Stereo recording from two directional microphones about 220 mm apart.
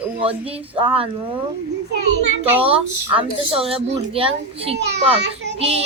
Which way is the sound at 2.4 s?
25° right (ahead or behind).